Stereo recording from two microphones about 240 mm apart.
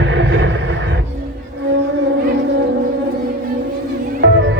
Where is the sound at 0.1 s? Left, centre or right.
Right.